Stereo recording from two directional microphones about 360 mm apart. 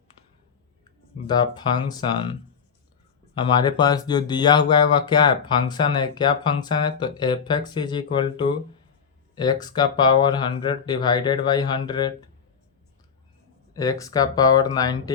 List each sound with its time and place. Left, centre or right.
1.3 s speech: centre
3.3 s speech: centre
13.7 s speech: centre